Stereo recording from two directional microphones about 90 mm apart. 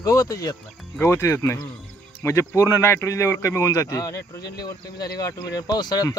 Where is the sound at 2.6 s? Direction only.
30° left (ahead or behind); by 6.1 s 45° left (ahead or behind).